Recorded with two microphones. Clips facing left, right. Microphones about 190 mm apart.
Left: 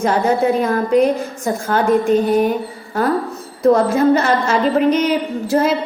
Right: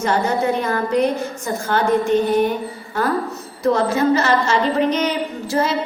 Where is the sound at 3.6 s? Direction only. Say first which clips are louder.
Left 4 dB; 55° left (ahead or behind).